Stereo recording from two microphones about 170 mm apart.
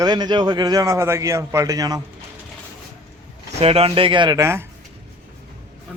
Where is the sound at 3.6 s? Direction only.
35° right (ahead or behind); by 4.6 s 15° right (ahead or behind).